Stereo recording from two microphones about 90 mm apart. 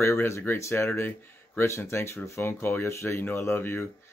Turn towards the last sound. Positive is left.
turn(degrees=25)  # may be behind; listen again after turning